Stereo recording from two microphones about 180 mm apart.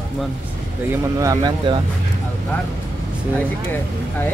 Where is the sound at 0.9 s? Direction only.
20° right (ahead or behind).